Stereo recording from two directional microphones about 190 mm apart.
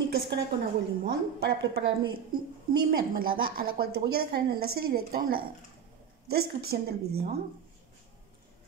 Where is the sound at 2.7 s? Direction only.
50° right (ahead or behind).